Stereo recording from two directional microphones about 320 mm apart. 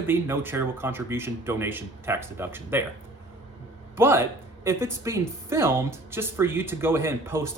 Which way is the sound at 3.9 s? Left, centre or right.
Centre.